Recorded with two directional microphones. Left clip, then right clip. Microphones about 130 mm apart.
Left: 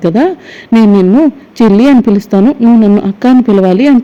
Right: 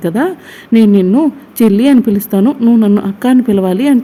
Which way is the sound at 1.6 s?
30° left (ahead or behind).